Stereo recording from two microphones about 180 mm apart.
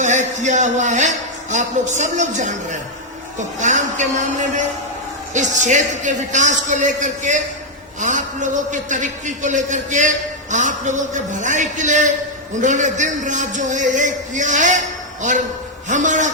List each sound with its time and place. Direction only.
0.0 s a man's voice: 40° right (ahead or behind)
15.9 s a man's voice: 45° right (ahead or behind)